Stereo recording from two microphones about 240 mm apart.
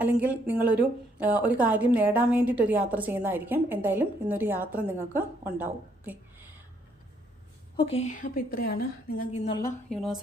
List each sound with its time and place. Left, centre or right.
0.0 s a woman's voice: centre
7.8 s a woman's voice: left
9.9 s a woman's voice: centre